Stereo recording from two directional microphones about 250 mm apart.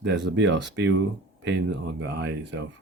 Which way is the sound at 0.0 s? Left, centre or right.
Right.